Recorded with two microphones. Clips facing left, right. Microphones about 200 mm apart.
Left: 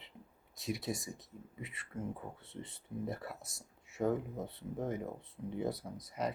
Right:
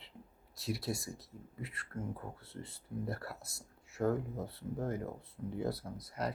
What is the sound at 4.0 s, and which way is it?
Speech, 10° left (ahead or behind).